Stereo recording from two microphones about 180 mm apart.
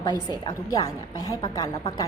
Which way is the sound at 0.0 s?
20° left (ahead or behind).